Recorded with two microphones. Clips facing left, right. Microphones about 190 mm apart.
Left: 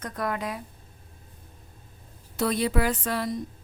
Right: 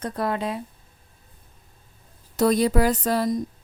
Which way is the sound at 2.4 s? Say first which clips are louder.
Right 6 dB; 40° right (ahead or behind).